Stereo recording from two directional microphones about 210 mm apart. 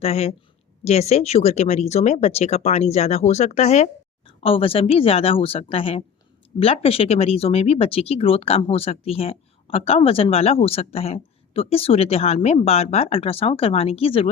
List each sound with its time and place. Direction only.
0.0 s speech: 30° left (ahead or behind)